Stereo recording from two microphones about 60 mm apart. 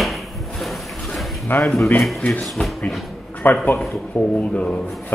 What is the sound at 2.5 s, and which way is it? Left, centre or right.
Speech, centre.